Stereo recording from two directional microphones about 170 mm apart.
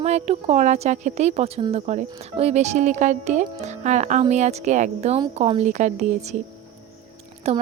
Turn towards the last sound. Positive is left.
turn(degrees=-40)  # may be behind; listen again after turning